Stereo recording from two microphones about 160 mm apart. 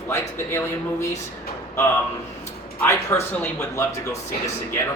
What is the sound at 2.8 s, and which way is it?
Speech, 15° left (ahead or behind).